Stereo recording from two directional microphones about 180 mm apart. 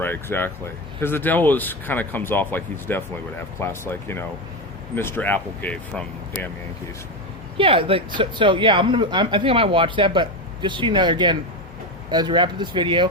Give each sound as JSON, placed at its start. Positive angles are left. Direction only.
{"t": 0.0, "sound": "speech", "side_deg": 10}
{"t": 7.6, "sound": "speech", "side_deg": -30}